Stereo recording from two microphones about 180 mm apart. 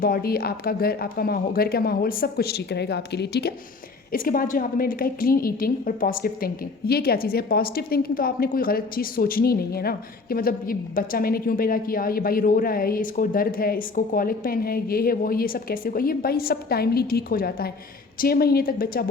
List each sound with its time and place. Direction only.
0.0 s a woman's voice: 55° left (ahead or behind)
4.1 s a woman's voice: 50° left (ahead or behind)